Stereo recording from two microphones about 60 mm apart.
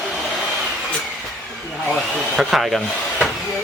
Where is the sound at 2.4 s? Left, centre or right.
Centre.